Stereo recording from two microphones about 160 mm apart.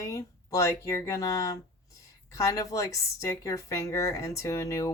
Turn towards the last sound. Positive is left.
turn(degrees=20)  # may be behind; listen again after turning